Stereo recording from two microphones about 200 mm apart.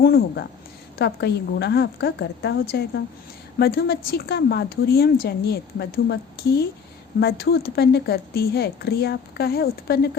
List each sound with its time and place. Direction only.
0.0 s a woman's voice: 50° left (ahead or behind)